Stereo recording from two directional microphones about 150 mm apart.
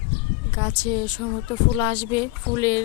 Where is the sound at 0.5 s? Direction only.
25° left (ahead or behind).